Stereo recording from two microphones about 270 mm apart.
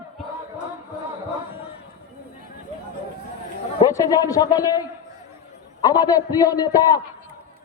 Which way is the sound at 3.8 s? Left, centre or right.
Centre.